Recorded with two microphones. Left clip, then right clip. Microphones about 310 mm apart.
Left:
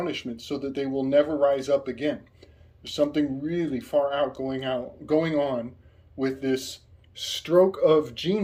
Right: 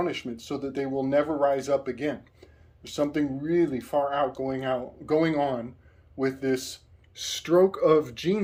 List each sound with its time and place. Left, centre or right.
0.0 s speech: centre